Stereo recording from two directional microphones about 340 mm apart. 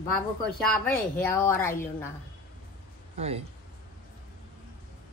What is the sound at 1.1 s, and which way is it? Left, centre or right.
Speech, centre.